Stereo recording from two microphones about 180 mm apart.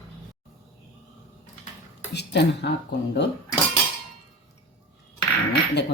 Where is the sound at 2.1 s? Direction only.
70° left (ahead or behind).